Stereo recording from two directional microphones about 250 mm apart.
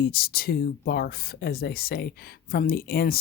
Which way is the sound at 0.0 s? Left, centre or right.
Left.